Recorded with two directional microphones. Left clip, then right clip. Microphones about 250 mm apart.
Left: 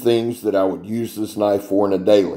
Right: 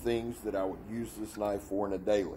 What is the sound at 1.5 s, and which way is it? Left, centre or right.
Speech, right.